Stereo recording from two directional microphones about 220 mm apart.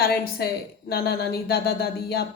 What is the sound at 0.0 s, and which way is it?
A woman's voice, 45° left (ahead or behind).